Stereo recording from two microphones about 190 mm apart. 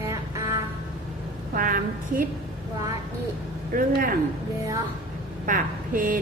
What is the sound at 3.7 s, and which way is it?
Speech, 50° right (ahead or behind).